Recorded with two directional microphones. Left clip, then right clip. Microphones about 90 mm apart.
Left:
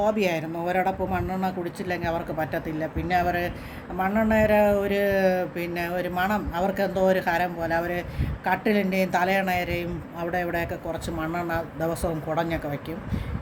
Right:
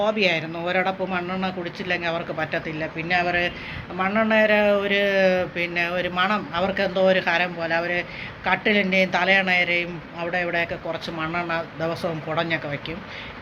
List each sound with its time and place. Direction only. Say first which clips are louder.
0.0 s speech: right 3 dB; 40° left (ahead or behind)
3.9 s a man's voice: right 3 dB; 20° left (ahead or behind); by 8.0 s 40° left (ahead or behind)
8.4 s speech: right 3 dB; 30° left (ahead or behind)